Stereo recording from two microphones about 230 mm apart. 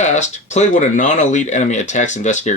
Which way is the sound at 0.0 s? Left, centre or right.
Left.